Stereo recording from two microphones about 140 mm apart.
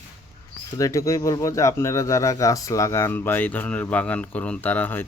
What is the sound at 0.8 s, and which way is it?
Speech, 25° left (ahead or behind).